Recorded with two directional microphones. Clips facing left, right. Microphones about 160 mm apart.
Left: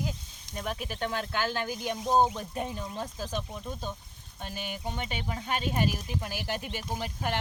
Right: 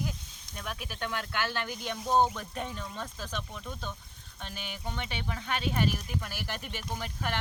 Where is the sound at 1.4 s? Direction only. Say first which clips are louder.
Left 3 dB; 15° left (ahead or behind).